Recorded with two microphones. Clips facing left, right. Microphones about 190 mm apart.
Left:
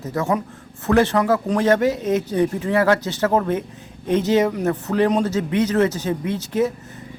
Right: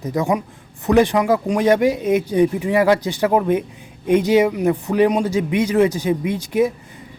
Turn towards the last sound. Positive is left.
turn(degrees=-15)  # may be behind; listen again after turning